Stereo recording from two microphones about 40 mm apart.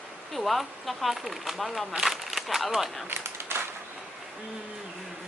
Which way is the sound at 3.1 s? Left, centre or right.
Right.